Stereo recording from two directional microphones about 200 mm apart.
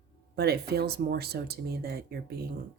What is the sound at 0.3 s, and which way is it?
Speech, 55° right (ahead or behind).